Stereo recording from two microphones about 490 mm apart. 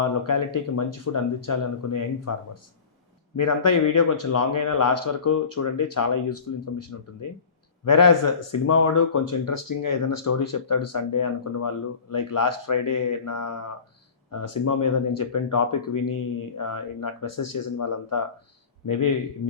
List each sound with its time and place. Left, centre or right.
0.0 s a man's voice: left